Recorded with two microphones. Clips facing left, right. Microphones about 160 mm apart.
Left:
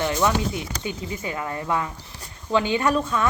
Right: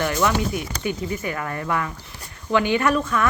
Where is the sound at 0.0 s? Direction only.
20° left (ahead or behind).